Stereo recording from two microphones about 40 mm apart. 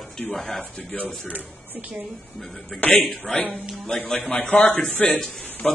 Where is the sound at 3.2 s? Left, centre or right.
Left.